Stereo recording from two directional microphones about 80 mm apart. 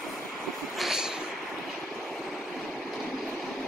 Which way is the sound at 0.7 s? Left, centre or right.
Centre.